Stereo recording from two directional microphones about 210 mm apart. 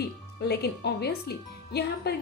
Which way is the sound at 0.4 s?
50° left (ahead or behind).